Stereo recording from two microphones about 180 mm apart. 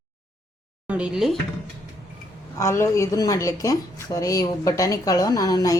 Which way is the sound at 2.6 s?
15° left (ahead or behind).